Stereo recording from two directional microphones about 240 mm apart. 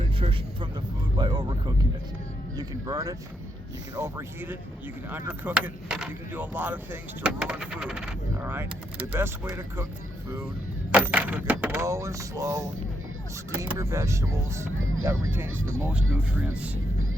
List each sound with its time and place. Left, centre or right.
0.0 s a sound: right
1.1 s vehicle: centre
2.6 s speech: centre
10.9 s speech: centre
14.8 s speech: right